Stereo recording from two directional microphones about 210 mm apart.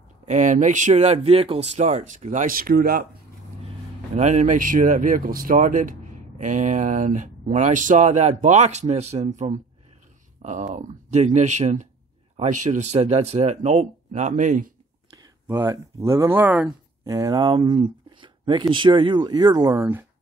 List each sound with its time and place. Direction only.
0.3 s speech: 35° right (ahead or behind)
3.6 s speech: 35° right (ahead or behind)
15.4 s speech: 10° right (ahead or behind)
17.1 s speech: 15° right (ahead or behind)